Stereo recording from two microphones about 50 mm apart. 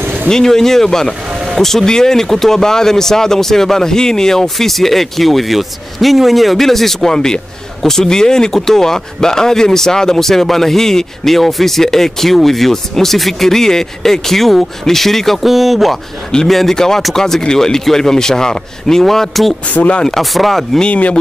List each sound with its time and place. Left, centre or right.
0.0 s a sound: right
0.3 s speech: centre
20.8 s a man's voice: left